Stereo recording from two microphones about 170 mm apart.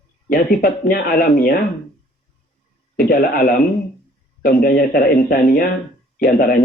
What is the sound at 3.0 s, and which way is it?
Speech, 60° left (ahead or behind).